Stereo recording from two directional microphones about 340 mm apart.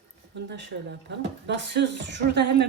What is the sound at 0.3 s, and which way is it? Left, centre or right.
A woman's voice, right.